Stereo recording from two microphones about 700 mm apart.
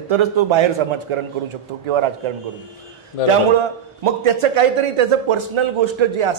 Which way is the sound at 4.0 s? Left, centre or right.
Right.